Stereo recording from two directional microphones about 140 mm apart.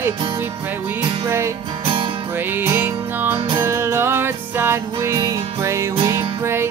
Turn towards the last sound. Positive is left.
turn(degrees=-20)  # may be behind; listen again after turning